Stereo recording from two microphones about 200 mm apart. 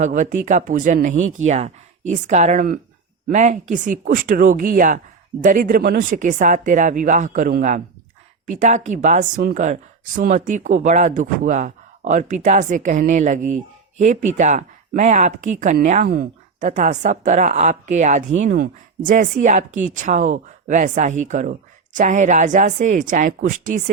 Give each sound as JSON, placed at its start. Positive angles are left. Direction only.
{"t": 0.0, "sound": "speech", "side_deg": -40}
{"t": 1.2, "sound": "speech", "side_deg": -90}
{"t": 1.5, "sound": "speech", "side_deg": -35}